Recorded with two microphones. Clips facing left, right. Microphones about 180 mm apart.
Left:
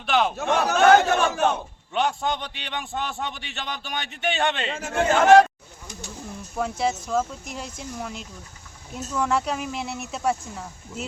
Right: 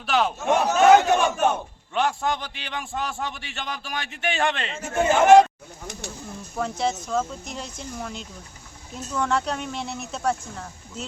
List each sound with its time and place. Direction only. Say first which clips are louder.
0.0 s a man's voice: left 1 dB; centre (ahead or behind)
0.4 s speech: right 2 dB; 15° right (ahead or behind)
1.9 s a man's voice: even; centre (ahead or behind)
5.0 s speech: right 1 dB; 15° right (ahead or behind)
6.6 s a man's voice: left 1 dB; 5° left (ahead or behind)